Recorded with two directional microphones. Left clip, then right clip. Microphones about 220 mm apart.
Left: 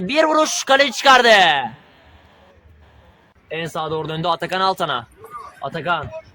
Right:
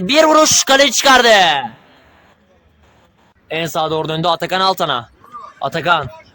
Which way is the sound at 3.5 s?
40° right (ahead or behind).